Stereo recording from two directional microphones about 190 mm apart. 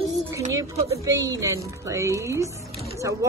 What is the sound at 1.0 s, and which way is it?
A woman's voice, 15° right (ahead or behind).